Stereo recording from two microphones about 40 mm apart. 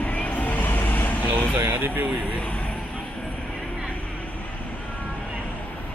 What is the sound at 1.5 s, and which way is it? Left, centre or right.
Speech, right.